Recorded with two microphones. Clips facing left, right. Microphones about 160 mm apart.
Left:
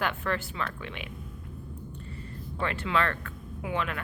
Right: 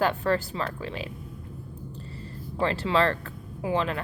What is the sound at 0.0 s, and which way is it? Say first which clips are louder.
Speech: right 6 dB; 35° right (ahead or behind).